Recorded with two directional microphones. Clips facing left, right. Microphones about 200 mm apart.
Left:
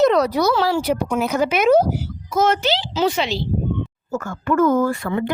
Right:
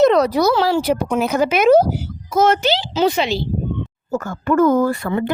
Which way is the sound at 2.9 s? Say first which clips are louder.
Right 4 dB; 15° right (ahead or behind).